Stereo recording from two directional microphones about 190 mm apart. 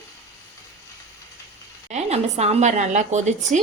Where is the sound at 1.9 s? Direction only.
35° right (ahead or behind).